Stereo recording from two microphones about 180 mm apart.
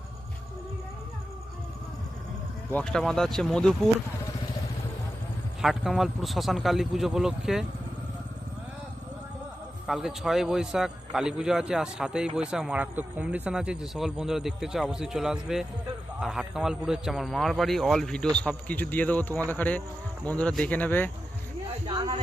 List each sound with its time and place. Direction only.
2.7 s speech: 5° left (ahead or behind)
5.6 s speech: centre (ahead or behind)
9.8 s speech: centre (ahead or behind)
21.8 s speech: 25° right (ahead or behind)